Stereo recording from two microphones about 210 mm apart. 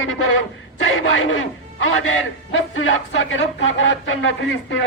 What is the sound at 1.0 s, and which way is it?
A man's voice, 70° left (ahead or behind).